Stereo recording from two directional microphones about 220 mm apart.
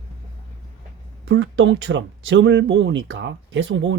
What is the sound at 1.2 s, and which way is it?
Speech, 55° right (ahead or behind).